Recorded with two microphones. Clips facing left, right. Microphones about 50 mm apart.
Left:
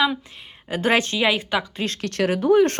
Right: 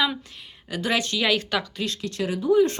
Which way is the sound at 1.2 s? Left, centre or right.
Centre.